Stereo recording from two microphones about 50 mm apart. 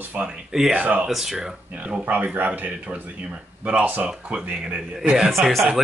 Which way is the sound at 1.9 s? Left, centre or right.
Right.